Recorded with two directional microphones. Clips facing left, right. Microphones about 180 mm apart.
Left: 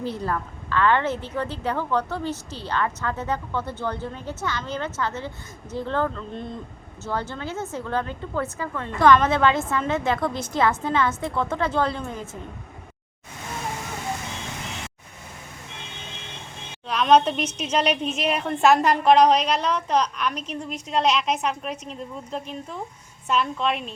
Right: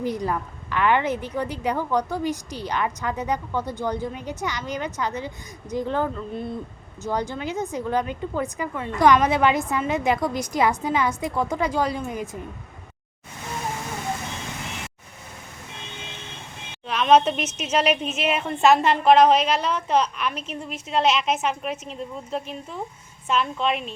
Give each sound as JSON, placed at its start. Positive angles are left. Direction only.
{"t": 0.0, "sound": "a woman's voice", "side_deg": -15}
{"t": 16.9, "sound": "a woman's voice", "side_deg": -5}